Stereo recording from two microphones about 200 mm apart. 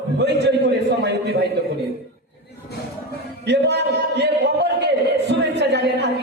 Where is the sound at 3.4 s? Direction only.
60° right (ahead or behind).